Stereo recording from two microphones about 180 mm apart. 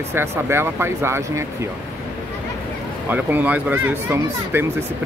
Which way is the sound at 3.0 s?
10° right (ahead or behind).